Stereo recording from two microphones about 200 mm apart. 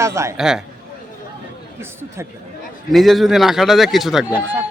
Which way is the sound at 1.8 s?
10° right (ahead or behind).